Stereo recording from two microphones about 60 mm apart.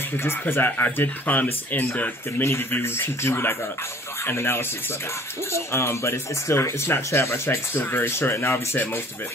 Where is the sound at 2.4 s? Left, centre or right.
Left.